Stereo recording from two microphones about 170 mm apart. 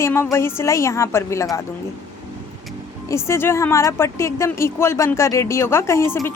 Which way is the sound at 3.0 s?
15° left (ahead or behind).